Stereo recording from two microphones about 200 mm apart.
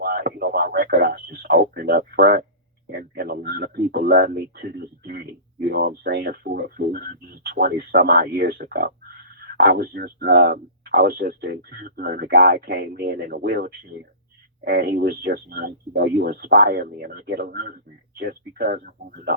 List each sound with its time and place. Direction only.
0.0 s radio: 50° right (ahead or behind)
2.8 s speech: 50° right (ahead or behind)